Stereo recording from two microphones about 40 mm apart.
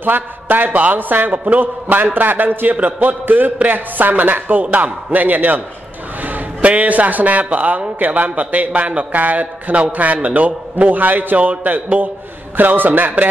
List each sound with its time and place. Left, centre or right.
0.0 s a man's voice: right